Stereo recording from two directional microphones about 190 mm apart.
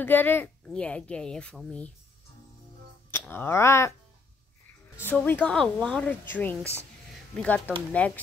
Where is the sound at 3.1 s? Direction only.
10° left (ahead or behind).